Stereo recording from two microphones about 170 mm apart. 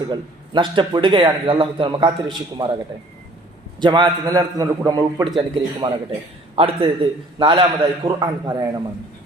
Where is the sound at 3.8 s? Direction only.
25° right (ahead or behind).